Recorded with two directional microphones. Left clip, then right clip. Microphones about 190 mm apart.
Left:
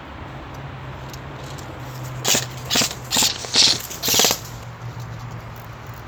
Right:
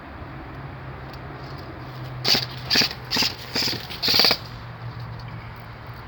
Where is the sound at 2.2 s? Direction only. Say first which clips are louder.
Even; 10° left (ahead or behind).